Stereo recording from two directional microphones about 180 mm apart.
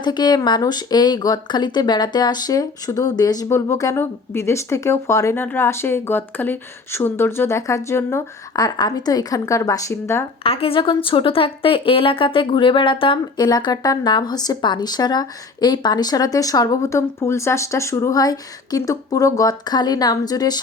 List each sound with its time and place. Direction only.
0.0 s speech: 25° left (ahead or behind)
10.4 s speech: 30° left (ahead or behind)